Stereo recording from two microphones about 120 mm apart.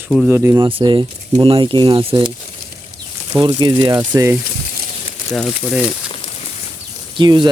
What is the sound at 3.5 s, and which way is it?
Speech, 40° right (ahead or behind).